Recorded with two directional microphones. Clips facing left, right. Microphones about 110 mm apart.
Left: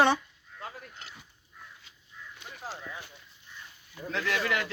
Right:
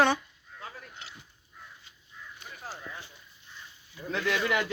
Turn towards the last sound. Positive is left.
turn(degrees=-5)  # may be behind; listen again after turning